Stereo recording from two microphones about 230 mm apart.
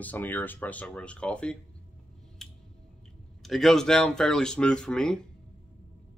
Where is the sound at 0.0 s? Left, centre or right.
Centre.